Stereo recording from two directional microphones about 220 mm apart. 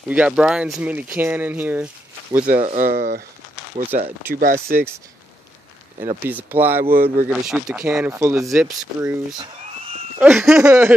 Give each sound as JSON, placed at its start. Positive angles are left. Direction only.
{"t": 0.1, "sound": "speech", "side_deg": -5}
{"t": 2.4, "sound": "speech", "side_deg": -35}
{"t": 3.7, "sound": "speech", "side_deg": -30}
{"t": 4.3, "sound": "speech", "side_deg": -40}
{"t": 6.0, "sound": "speech", "side_deg": -10}
{"t": 9.4, "sound": "a sound", "side_deg": -25}
{"t": 10.1, "sound": "speech", "side_deg": -5}
{"t": 10.6, "sound": "speech", "side_deg": -15}